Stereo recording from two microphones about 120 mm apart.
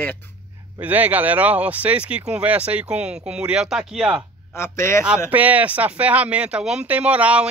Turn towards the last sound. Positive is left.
turn(degrees=-10)  # may be behind; listen again after turning